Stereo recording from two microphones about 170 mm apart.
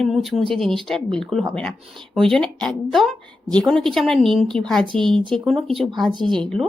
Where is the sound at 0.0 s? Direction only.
Centre (ahead or behind).